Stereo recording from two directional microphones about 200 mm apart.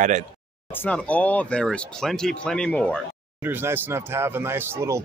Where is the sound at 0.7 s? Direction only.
10° left (ahead or behind).